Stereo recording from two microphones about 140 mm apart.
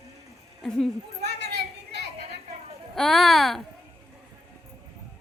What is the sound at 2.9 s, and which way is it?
Speech, centre (ahead or behind).